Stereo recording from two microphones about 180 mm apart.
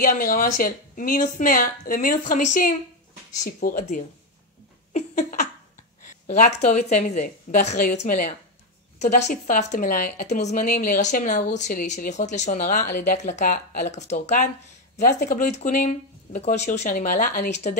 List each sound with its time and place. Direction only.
0.0 s a woman's voice: 50° left (ahead or behind)
4.9 s a sound: 45° left (ahead or behind)
6.0 s a woman's voice: 45° left (ahead or behind)